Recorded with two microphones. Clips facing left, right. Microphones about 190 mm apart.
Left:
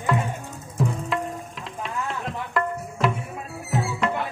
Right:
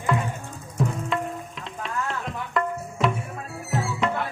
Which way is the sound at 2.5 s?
Centre (ahead or behind).